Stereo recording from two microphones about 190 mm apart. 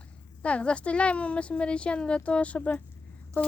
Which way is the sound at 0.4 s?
5° left (ahead or behind).